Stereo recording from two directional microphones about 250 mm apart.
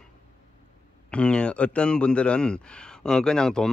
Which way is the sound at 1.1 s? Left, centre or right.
Centre.